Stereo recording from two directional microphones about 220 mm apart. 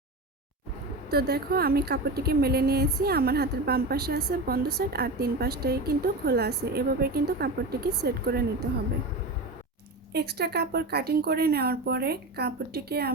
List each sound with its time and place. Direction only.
1.1 s speech: 45° right (ahead or behind)
10.1 s speech: 45° right (ahead or behind)